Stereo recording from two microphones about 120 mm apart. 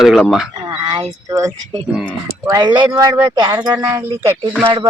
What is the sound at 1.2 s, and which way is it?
Speech, 25° right (ahead or behind).